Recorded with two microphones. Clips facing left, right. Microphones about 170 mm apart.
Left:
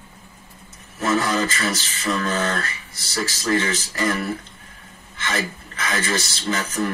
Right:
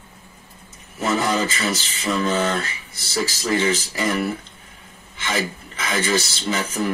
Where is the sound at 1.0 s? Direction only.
Centre (ahead or behind).